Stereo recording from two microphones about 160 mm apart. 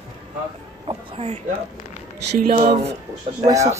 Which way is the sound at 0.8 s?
35° right (ahead or behind).